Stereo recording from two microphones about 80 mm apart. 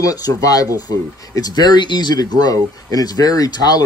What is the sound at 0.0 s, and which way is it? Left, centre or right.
Speech, left.